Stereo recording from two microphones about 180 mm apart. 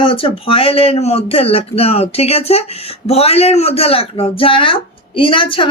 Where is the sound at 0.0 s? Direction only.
30° left (ahead or behind).